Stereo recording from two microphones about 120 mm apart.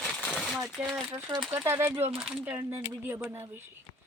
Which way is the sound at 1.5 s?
20° right (ahead or behind).